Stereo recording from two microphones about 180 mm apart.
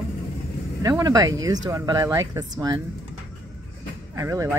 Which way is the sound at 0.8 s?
20° right (ahead or behind).